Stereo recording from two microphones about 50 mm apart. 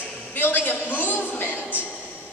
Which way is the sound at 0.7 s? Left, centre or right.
Left.